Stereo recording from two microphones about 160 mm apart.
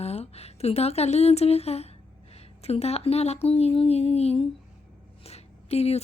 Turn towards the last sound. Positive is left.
turn(degrees=40)  # may be behind; listen again after turning